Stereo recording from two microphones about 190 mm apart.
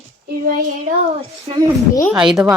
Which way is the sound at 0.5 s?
50° right (ahead or behind).